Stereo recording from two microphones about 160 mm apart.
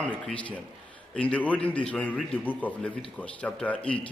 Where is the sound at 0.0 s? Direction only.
10° left (ahead or behind).